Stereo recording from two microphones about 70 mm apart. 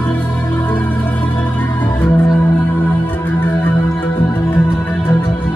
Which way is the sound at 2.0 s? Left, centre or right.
Left.